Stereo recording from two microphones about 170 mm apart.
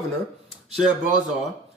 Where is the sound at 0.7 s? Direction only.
5° right (ahead or behind).